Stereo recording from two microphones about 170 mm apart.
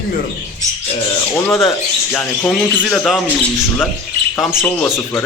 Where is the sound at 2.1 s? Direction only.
10° left (ahead or behind).